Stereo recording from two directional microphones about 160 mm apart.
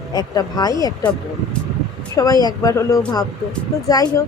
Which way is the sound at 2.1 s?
20° left (ahead or behind).